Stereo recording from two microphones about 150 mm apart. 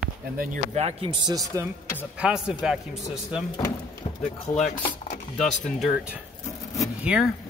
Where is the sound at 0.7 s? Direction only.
40° right (ahead or behind); by 1.7 s 20° right (ahead or behind).